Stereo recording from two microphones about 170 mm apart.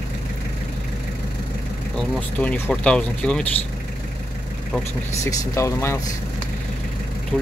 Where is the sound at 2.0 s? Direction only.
10° left (ahead or behind).